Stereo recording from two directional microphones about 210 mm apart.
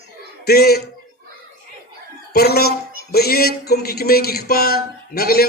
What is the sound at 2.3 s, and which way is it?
Speech, 50° left (ahead or behind).